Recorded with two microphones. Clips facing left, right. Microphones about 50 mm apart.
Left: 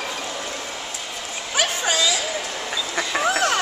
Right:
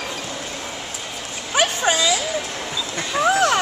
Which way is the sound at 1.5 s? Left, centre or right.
Right.